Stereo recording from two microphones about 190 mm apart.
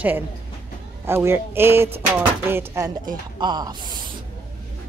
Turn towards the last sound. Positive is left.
turn(degrees=-20)  # may be behind; listen again after turning